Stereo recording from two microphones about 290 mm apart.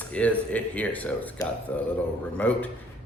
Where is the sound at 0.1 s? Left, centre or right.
Centre.